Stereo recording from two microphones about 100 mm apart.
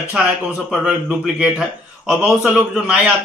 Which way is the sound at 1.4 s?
10° right (ahead or behind).